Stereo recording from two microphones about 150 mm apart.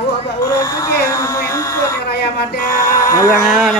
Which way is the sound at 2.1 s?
90° left.